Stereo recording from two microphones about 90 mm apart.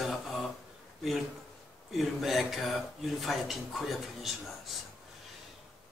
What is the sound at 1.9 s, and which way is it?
Speech, centre (ahead or behind).